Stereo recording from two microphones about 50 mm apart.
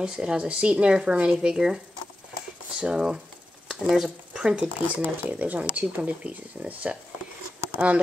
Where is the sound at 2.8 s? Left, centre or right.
Centre.